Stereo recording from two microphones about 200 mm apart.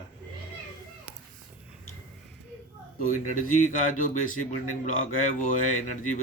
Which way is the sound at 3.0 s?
40° left (ahead or behind).